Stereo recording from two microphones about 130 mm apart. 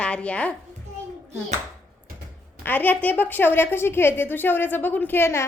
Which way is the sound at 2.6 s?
15° left (ahead or behind).